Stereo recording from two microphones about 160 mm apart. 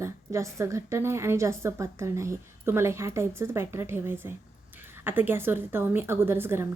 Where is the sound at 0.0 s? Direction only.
20° right (ahead or behind).